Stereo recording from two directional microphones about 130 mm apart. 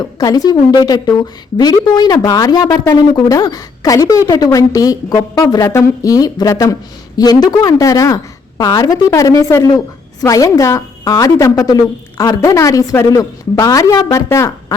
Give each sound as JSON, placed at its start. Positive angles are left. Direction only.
{"t": 0.0, "sound": "a woman's voice", "side_deg": 30}